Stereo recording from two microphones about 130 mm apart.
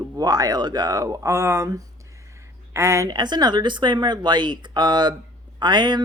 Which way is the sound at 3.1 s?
35° right (ahead or behind).